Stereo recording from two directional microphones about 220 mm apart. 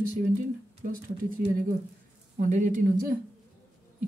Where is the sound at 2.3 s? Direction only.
35° right (ahead or behind).